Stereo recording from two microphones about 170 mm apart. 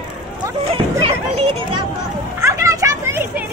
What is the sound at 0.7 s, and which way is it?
Music, 35° right (ahead or behind).